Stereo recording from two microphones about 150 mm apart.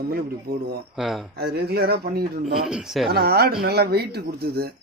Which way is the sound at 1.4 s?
90° right.